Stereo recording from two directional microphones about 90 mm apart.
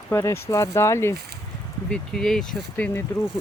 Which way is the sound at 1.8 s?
5° left (ahead or behind).